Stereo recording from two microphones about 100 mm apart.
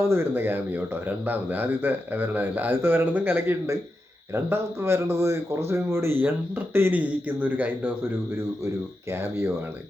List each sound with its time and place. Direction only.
0.1 s a man's voice: 20° right (ahead or behind)
9.1 s speech: 25° right (ahead or behind)